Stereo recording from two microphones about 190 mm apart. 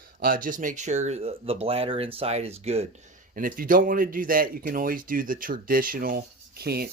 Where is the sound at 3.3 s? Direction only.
50° right (ahead or behind).